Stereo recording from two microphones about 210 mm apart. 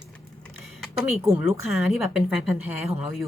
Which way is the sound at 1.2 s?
15° right (ahead or behind).